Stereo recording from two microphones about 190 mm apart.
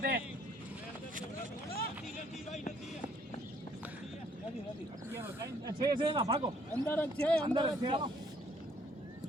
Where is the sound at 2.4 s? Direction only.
35° left (ahead or behind).